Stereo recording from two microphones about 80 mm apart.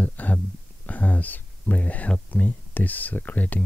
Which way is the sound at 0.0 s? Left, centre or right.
Left.